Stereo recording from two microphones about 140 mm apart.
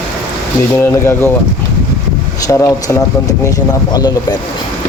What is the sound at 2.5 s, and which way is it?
Speech, 20° left (ahead or behind).